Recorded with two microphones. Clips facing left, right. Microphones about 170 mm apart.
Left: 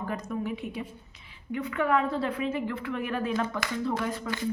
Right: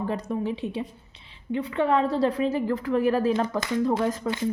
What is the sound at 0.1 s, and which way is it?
A woman's voice, 30° right (ahead or behind).